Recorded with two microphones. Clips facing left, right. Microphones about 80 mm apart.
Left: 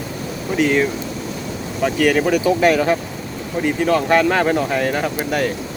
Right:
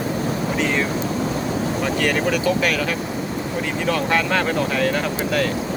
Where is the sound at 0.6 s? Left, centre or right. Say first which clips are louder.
Left 7 dB; centre.